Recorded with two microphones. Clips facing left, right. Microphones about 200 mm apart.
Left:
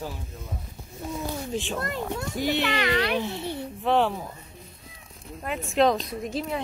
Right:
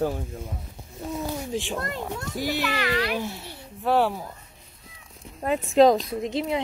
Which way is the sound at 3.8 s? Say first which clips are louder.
Right 1 dB; 5° right (ahead or behind).